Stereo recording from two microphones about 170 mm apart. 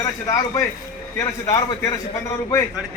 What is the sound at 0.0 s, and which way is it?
A man's voice, 20° left (ahead or behind).